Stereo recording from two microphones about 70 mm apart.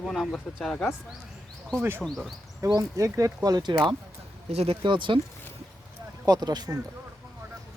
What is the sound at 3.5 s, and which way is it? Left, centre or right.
Speech, right.